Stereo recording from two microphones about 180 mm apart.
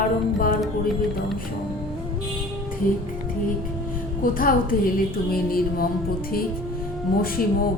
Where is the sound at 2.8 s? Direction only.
50° left (ahead or behind).